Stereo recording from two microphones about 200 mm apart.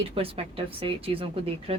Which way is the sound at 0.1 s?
25° right (ahead or behind).